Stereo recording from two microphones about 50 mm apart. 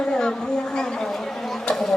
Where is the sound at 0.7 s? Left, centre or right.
Centre.